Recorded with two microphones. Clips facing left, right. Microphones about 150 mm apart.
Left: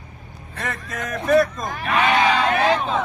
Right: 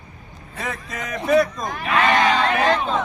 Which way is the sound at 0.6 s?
Centre (ahead or behind).